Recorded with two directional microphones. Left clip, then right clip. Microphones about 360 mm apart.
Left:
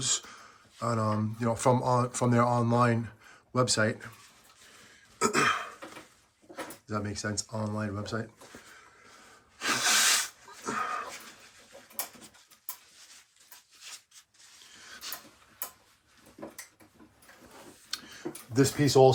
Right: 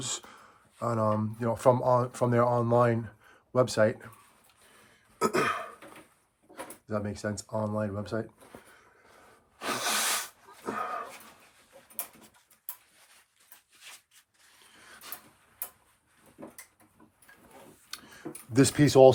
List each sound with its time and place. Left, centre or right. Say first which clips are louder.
0.0 s speech: left 5 dB; centre
5.2 s cough: left 1 dB; centre
6.8 s speech: right 2 dB; centre
9.6 s sneeze: left 4 dB; centre
13.7 s a sound: left 3 dB; right
17.9 s tick-tock: left 4 dB; centre